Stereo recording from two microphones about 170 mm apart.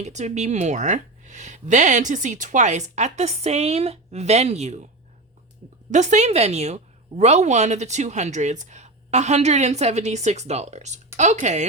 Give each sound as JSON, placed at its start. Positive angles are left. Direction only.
{"t": 0.0, "sound": "a woman's voice", "side_deg": -40}
{"t": 5.9, "sound": "a woman's voice", "side_deg": -45}